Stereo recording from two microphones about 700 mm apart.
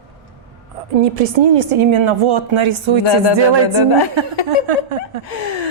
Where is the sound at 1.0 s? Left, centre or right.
Right.